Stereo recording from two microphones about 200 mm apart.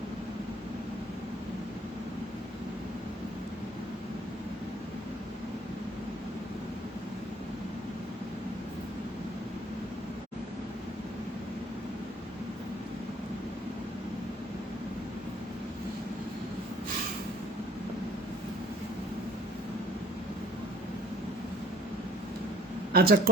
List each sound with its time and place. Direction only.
22.9 s speech: 50° right (ahead or behind)